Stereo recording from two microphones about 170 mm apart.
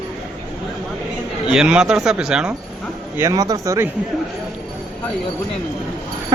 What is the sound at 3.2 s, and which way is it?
Speech, 20° right (ahead or behind).